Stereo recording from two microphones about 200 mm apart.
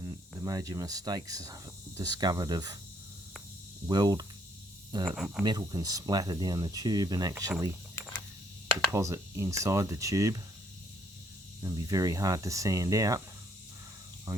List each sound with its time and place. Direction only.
0.0 s speech: 15° right (ahead or behind)
3.8 s speech: 20° right (ahead or behind)
5.0 s speech: centre (ahead or behind)
5.4 s speech: 20° right (ahead or behind)
8.9 s speech: 15° right (ahead or behind)
11.6 s speech: 15° right (ahead or behind)
14.3 s insect: 15° right (ahead or behind)